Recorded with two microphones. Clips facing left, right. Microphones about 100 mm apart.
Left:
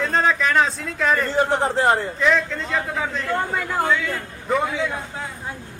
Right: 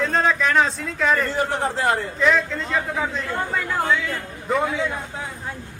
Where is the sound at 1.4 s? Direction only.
25° left (ahead or behind).